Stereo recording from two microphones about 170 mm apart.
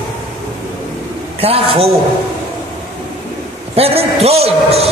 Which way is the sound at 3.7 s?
35° right (ahead or behind).